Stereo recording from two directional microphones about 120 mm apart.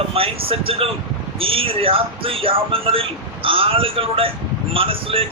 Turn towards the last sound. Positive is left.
turn(degrees=-50)  # may be behind; listen again after turning